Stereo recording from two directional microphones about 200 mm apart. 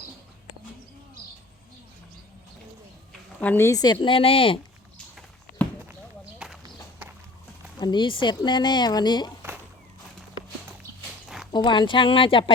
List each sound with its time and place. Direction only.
3.4 s a woman's voice: 10° left (ahead or behind); by 4.6 s 25° left (ahead or behind)
6.4 s walk: 5° right (ahead or behind)
7.8 s speech: 20° left (ahead or behind)
11.5 s speech: 25° left (ahead or behind)